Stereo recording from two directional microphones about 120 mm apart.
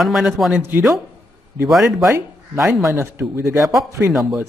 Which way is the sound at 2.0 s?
20° right (ahead or behind).